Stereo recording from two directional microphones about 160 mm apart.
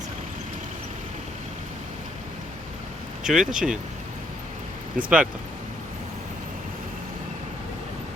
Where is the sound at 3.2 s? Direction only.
5° right (ahead or behind).